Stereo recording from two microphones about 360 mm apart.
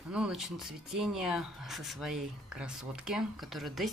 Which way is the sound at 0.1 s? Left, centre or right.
Centre.